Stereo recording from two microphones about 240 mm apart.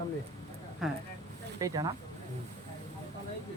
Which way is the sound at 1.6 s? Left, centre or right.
Centre.